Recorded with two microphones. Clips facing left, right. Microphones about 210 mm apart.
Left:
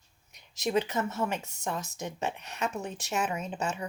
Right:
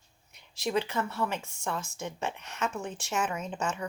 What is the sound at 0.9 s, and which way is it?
Speech, 20° left (ahead or behind).